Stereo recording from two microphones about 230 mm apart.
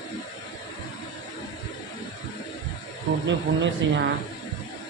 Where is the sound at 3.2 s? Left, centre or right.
Right.